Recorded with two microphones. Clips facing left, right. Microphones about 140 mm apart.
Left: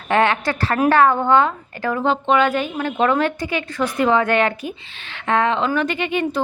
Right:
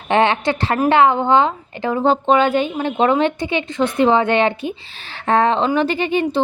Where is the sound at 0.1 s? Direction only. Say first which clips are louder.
Right 2 dB; 25° right (ahead or behind).